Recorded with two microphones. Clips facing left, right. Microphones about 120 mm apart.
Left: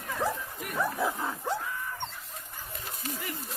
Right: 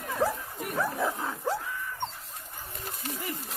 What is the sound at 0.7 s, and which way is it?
Dog, centre (ahead or behind).